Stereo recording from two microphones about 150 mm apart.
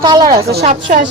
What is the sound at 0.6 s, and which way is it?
Speech, 55° right (ahead or behind).